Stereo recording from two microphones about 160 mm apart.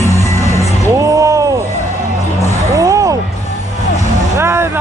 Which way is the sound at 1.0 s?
20° right (ahead or behind).